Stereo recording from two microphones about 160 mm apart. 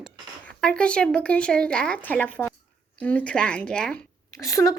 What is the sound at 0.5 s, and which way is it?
Speech, 5° left (ahead or behind).